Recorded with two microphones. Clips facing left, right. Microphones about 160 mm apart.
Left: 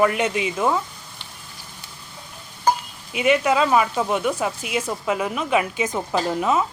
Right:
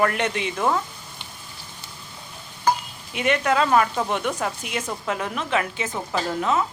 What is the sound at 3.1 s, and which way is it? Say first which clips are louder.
Speech: left 3 dB; 5° left (ahead or behind).